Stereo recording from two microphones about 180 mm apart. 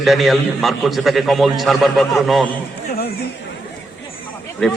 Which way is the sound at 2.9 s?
60° left (ahead or behind).